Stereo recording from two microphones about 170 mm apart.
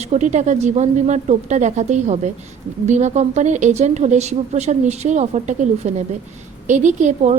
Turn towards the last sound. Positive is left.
turn(degrees=-45)  # may be behind; listen again after turning